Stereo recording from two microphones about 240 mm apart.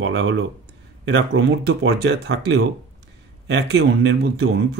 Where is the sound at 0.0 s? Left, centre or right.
Right.